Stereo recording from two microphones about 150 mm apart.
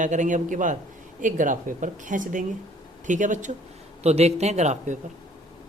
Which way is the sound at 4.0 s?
45° right (ahead or behind).